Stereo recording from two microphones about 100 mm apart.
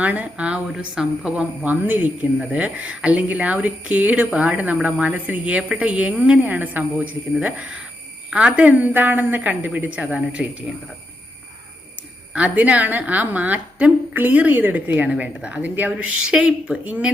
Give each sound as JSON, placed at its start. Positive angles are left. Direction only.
{"t": 0.0, "sound": "a woman's voice", "side_deg": -15}
{"t": 1.6, "sound": "a woman's voice", "side_deg": -15}
{"t": 12.3, "sound": "a woman's voice", "side_deg": -15}